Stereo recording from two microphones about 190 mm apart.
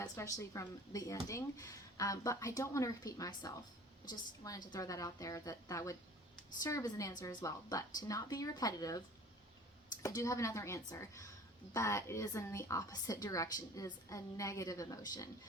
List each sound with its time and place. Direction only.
0.0 s a woman's voice: 15° left (ahead or behind)